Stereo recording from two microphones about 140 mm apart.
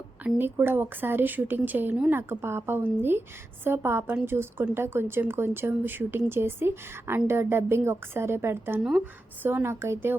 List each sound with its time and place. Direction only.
0.3 s a woman's voice: 15° right (ahead or behind)